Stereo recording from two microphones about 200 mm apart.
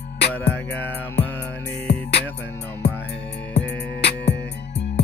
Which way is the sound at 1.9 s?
60° left (ahead or behind).